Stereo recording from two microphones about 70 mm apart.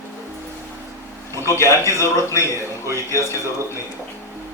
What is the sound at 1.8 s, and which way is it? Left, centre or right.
Speech, left.